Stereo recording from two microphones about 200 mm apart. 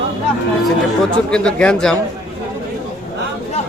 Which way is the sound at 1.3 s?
5° left (ahead or behind).